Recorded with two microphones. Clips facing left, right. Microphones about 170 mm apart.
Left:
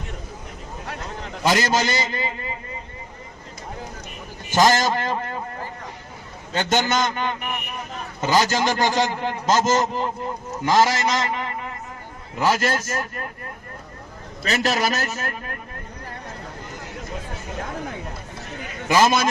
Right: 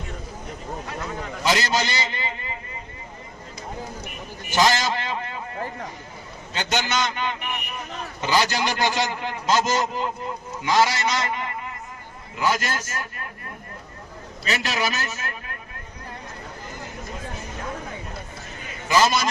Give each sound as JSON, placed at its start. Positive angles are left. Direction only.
{"t": 1.5, "sound": "a man's voice", "side_deg": 45}
{"t": 4.5, "sound": "a man's voice", "side_deg": 45}
{"t": 6.5, "sound": "a man's voice", "side_deg": 45}
{"t": 12.4, "sound": "a man's voice", "side_deg": 40}
{"t": 14.4, "sound": "a man's voice", "side_deg": 40}
{"t": 18.9, "sound": "a man's voice", "side_deg": 50}